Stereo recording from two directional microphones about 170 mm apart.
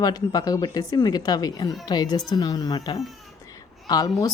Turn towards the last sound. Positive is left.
turn(degrees=20)  # may be behind; listen again after turning